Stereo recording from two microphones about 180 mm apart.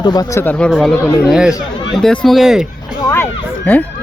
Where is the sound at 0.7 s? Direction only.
5° left (ahead or behind).